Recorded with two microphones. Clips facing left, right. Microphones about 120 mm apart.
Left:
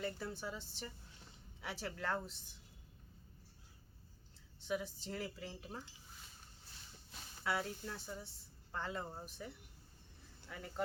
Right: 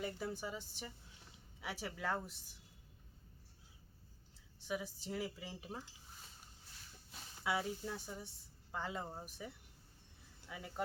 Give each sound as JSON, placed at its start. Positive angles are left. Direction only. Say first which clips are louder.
{"t": 0.0, "sound": "speech", "louder": "right 1 dB", "side_deg": -10}
{"t": 4.7, "sound": "speech", "louder": "left 1 dB", "side_deg": -10}
{"t": 7.1, "sound": "speech", "louder": "right 1 dB", "side_deg": -10}